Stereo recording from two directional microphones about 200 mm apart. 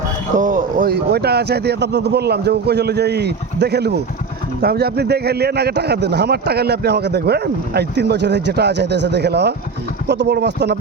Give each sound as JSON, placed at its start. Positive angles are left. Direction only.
{"t": 0.3, "sound": "speech", "side_deg": -45}